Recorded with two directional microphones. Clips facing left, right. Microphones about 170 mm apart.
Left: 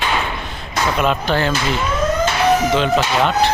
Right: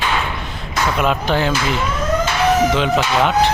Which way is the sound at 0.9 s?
5° right (ahead or behind).